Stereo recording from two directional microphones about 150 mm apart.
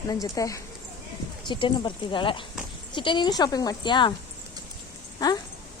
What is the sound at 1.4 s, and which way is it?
A woman's voice, 30° left (ahead or behind).